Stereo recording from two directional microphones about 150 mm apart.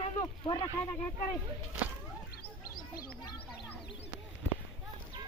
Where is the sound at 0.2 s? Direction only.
30° left (ahead or behind).